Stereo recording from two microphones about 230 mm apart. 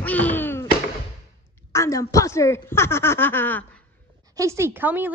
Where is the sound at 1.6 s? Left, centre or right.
Centre.